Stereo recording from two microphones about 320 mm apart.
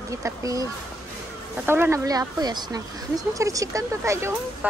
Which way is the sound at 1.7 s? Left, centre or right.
Centre.